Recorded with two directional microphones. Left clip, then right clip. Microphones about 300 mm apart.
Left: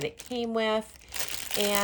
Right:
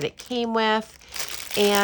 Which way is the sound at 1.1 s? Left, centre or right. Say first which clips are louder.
Right 5 dB; centre.